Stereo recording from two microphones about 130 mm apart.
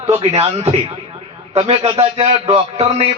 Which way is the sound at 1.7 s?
50° right (ahead or behind).